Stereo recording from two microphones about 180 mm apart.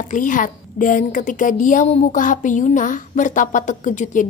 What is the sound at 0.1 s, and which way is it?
A woman's voice, 45° left (ahead or behind).